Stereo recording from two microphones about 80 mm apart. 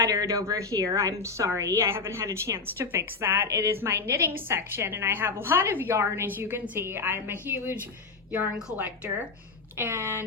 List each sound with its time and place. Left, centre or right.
0.1 s a woman's voice: right
8.3 s a woman's voice: centre
9.7 s a woman's voice: right